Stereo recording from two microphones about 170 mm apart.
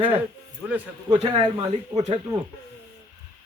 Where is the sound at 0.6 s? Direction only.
Centre (ahead or behind).